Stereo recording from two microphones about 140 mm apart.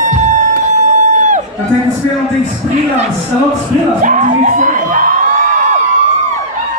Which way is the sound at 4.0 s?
65° right (ahead or behind).